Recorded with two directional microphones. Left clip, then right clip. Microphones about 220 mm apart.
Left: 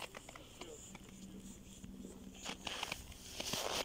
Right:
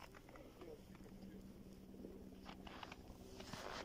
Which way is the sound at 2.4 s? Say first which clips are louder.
Left 13 dB; 10° left (ahead or behind).